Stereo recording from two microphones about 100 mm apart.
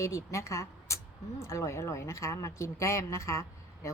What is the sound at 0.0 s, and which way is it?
A woman's voice, 30° left (ahead or behind).